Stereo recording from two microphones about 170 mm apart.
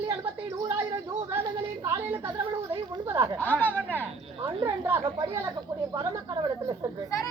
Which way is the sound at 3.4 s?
10° left (ahead or behind).